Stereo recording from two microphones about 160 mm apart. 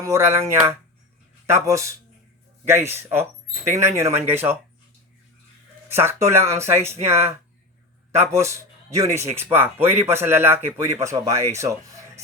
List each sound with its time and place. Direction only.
0.0 s speech: 15° right (ahead or behind)
5.9 s speech: 15° right (ahead or behind)
8.1 s speech: 15° right (ahead or behind)